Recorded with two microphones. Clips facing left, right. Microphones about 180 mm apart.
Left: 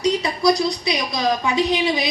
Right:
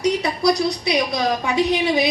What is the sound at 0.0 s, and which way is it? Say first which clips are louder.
A woman's voice: even; 60° right (ahead or behind).